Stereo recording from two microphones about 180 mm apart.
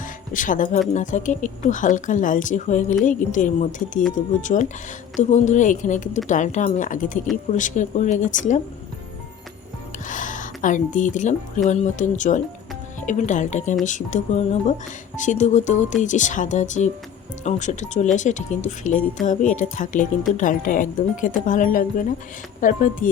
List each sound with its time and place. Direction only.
0.3 s speech: 45° left (ahead or behind)
10.1 s speech: 45° left (ahead or behind)